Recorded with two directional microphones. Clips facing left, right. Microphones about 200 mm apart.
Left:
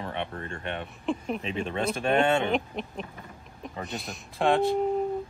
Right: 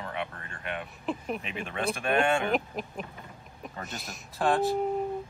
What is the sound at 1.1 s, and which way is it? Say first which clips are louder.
Speech: left 4 dB; centre (ahead or behind).